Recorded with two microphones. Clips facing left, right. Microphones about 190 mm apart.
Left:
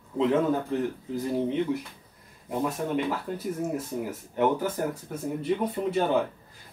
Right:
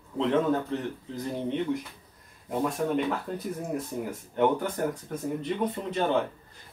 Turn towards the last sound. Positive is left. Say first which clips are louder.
# left 2 dB
turn(degrees=10)  # may be behind; listen again after turning